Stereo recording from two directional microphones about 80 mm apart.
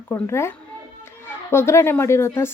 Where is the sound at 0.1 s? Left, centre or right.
Left.